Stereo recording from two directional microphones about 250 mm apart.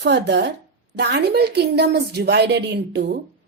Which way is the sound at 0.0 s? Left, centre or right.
Right.